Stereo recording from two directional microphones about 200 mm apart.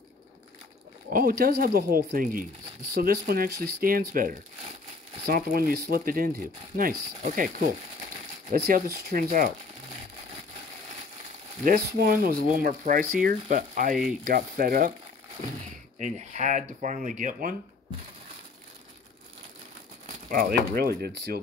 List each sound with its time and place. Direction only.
1.1 s speech: 50° right (ahead or behind)
8.5 s speech: 50° right (ahead or behind)
11.6 s speech: 45° right (ahead or behind)
16.0 s speech: 35° right (ahead or behind)
20.2 s speech: 45° right (ahead or behind)